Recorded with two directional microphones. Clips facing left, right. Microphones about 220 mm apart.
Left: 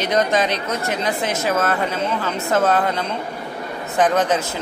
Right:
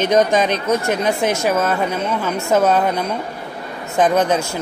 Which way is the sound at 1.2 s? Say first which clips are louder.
Right 4 dB; 20° left (ahead or behind).